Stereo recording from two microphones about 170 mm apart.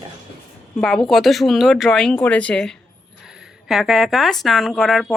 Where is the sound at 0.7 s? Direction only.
Centre (ahead or behind).